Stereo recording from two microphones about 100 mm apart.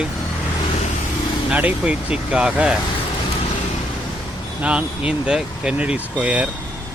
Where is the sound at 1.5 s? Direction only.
15° right (ahead or behind).